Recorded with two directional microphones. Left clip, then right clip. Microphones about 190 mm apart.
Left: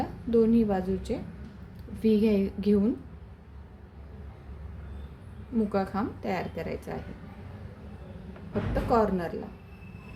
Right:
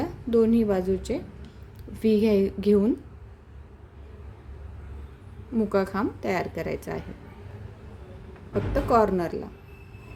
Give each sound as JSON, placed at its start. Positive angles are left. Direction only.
{"t": 0.0, "sound": "a woman's voice", "side_deg": -35}
{"t": 5.5, "sound": "a woman's voice", "side_deg": -35}
{"t": 8.7, "sound": "a woman's voice", "side_deg": -35}